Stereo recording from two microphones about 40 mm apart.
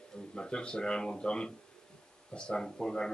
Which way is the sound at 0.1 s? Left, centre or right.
Left.